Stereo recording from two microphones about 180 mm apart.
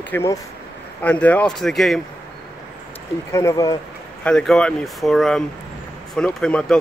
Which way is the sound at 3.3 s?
15° left (ahead or behind).